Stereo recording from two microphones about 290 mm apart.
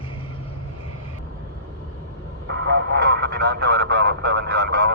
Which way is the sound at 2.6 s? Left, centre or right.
Right.